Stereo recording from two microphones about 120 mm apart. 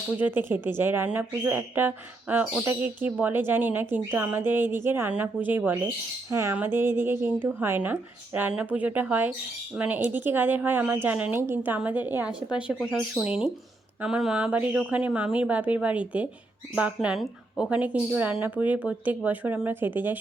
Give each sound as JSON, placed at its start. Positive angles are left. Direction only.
{"t": 0.2, "sound": "a woman's voice", "side_deg": -15}